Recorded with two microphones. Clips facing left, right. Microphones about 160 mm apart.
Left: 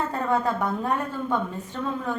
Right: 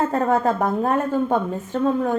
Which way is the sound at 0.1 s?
45° right (ahead or behind).